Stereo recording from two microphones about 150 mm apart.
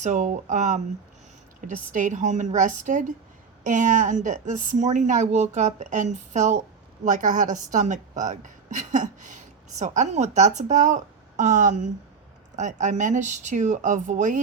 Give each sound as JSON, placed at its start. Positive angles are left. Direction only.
{"t": 0.0, "sound": "a woman's voice", "side_deg": -55}